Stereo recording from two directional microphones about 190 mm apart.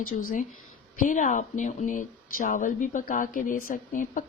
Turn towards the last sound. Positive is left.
turn(degrees=45)  # may be behind; listen again after turning